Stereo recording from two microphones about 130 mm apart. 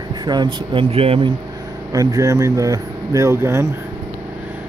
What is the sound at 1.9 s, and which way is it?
Speech, 25° right (ahead or behind).